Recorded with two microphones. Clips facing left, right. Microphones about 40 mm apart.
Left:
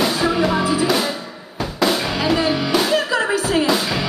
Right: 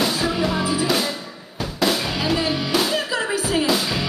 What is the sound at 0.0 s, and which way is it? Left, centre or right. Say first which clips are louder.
Music: left 3 dB; centre.